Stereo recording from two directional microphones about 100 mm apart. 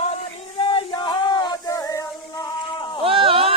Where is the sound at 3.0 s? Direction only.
65° right (ahead or behind).